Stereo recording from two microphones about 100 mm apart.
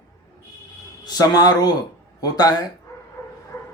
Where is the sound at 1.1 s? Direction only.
40° left (ahead or behind).